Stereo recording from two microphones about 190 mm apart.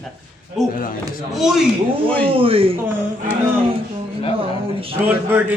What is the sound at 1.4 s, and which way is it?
Speech, centre (ahead or behind).